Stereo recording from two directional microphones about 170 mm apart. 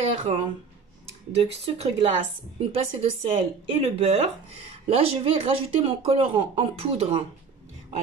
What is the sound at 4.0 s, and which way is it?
Speech, 40° right (ahead or behind).